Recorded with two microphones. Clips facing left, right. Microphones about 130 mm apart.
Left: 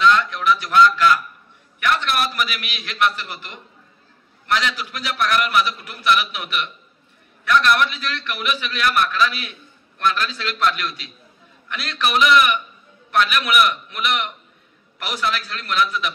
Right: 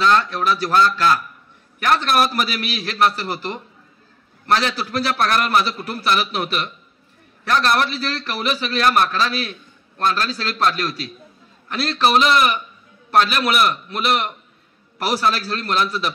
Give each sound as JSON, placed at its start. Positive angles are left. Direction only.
{"t": 0.0, "sound": "a man's voice", "side_deg": -35}